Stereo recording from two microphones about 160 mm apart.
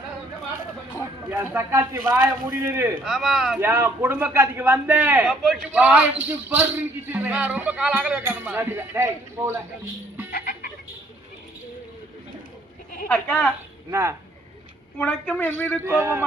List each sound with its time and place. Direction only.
1.3 s speech: 15° right (ahead or behind)
3.0 s speech: centre (ahead or behind)
3.6 s speech: 15° right (ahead or behind)
13.1 s a man's voice: 10° left (ahead or behind)
13.9 s speech: 15° right (ahead or behind)
14.9 s a man's voice: 10° left (ahead or behind)
15.8 s speech: 15° right (ahead or behind)